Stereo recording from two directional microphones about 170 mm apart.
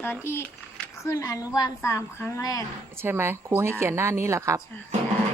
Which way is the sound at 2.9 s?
15° right (ahead or behind).